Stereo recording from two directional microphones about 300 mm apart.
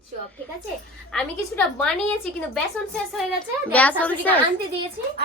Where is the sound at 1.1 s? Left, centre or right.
Centre.